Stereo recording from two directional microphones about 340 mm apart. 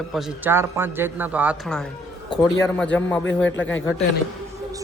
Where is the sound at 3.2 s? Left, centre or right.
Left.